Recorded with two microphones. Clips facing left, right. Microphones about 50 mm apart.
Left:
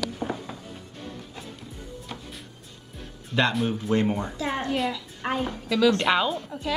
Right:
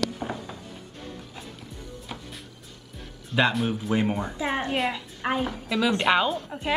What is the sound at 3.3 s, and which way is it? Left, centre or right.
Speech, centre.